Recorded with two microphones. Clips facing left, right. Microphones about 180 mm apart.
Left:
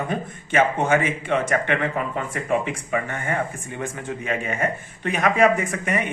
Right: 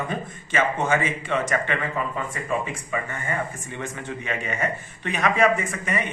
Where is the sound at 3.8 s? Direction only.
45° left (ahead or behind).